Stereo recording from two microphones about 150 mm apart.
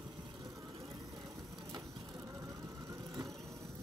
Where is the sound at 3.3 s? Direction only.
Centre (ahead or behind).